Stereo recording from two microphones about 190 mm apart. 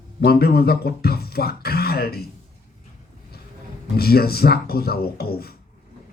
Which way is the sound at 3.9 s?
55° left (ahead or behind).